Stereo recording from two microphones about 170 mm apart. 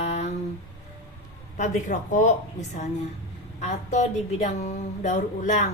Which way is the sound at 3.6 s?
45° left (ahead or behind).